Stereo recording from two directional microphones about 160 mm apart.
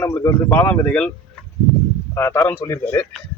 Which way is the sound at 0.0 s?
15° left (ahead or behind).